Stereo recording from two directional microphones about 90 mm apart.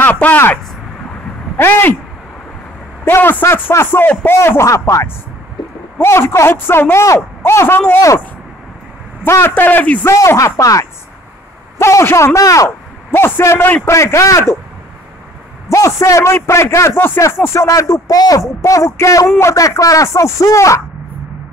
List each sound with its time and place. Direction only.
0.0 s speech: 20° left (ahead or behind)
1.6 s a man's voice: 20° left (ahead or behind)
3.1 s a man's voice: 25° left (ahead or behind)
9.2 s a man's voice: 25° left (ahead or behind)
10.1 s a man's voice: 35° left (ahead or behind)
15.7 s speech: 35° left (ahead or behind)